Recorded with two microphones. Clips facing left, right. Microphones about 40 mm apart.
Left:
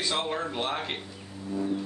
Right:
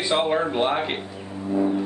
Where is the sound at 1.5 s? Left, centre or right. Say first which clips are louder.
Right 8 dB; right.